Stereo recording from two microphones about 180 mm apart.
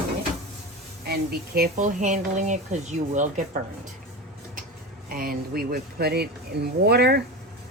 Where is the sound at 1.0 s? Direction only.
60° right (ahead or behind).